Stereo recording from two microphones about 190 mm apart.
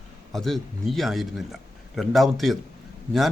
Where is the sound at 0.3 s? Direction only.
Centre (ahead or behind).